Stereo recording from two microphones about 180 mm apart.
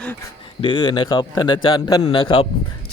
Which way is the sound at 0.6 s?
25° left (ahead or behind).